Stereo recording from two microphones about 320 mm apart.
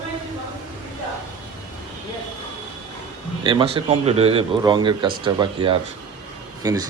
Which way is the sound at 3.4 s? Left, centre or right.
Centre.